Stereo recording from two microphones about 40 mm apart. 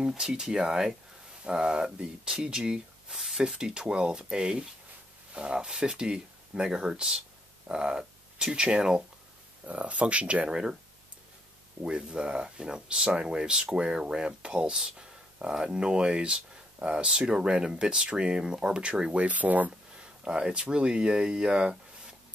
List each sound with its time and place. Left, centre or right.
0.1 s speech: centre
7.6 s a sound: right
8.5 s speech: right
9.7 s speech: right
12.1 s speech: right
15.0 s a sound: right
15.6 s speech: right
19.1 s speech: right
20.0 s a sound: centre
20.7 s speech: right